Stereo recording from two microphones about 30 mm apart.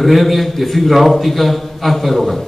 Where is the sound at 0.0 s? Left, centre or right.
Centre.